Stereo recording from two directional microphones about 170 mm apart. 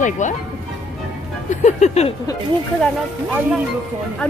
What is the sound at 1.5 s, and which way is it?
Music, 45° left (ahead or behind).